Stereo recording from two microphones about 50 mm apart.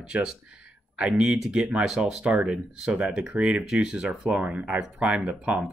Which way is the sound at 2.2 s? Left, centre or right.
Right.